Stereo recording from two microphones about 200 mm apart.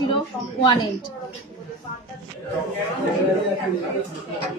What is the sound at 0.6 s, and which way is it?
Speech, 25° left (ahead or behind).